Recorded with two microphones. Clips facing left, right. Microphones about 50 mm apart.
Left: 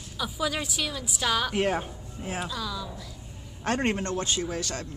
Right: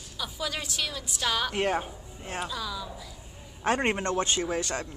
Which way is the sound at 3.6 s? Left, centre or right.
Centre.